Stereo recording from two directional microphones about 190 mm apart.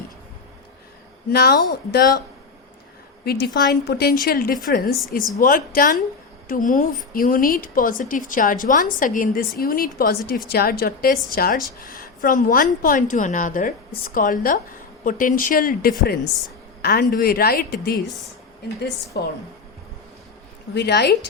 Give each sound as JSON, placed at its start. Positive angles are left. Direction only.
{"t": 1.3, "sound": "speech", "side_deg": 55}
{"t": 3.2, "sound": "a woman's voice", "side_deg": 60}
{"t": 19.1, "sound": "speech", "side_deg": 55}
{"t": 20.7, "sound": "speech", "side_deg": 60}